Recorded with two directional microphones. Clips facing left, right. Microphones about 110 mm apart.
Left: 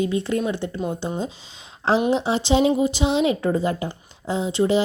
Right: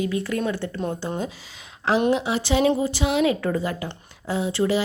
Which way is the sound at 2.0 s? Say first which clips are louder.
Left 1 dB; 30° left (ahead or behind).